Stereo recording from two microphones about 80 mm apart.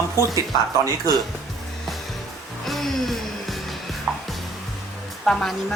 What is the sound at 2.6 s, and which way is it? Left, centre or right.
Music, centre.